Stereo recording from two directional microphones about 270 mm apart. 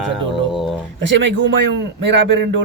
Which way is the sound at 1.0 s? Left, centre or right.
Right.